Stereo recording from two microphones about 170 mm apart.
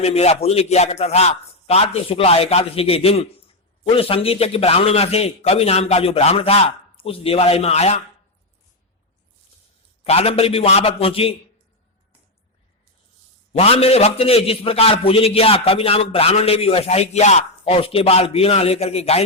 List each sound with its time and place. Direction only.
0.0 s a man's voice: 40° left (ahead or behind)
10.0 s a man's voice: 35° left (ahead or behind)
13.5 s a man's voice: 35° left (ahead or behind)